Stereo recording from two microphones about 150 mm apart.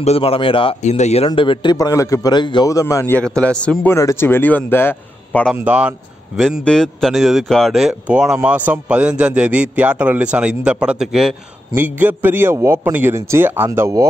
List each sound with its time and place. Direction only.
0.0 s a man's voice: 40° left (ahead or behind); by 3.2 s 20° left (ahead or behind)
3.3 s speech: 5° left (ahead or behind)
5.6 s a man's voice: 10° right (ahead or behind)